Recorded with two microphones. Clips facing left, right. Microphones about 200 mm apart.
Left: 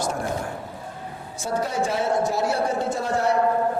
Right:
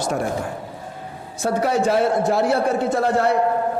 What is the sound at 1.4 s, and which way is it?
A man's voice, 70° right (ahead or behind).